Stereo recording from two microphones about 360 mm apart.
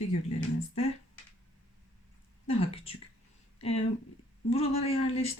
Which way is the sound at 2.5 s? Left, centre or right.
Centre.